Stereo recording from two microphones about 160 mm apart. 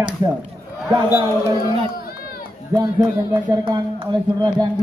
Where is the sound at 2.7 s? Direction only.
25° right (ahead or behind).